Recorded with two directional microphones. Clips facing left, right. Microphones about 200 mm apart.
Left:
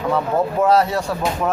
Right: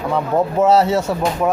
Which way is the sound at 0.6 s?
25° right (ahead or behind).